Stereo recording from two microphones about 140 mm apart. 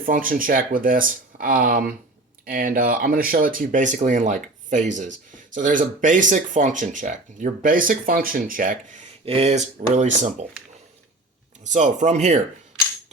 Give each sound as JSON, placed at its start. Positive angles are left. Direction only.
{"t": 0.0, "sound": "speech", "side_deg": -85}
{"t": 9.2, "sound": "speech", "side_deg": -45}
{"t": 11.6, "sound": "speech", "side_deg": -60}